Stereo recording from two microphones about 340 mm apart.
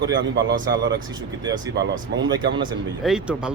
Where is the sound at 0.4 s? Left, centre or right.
Right.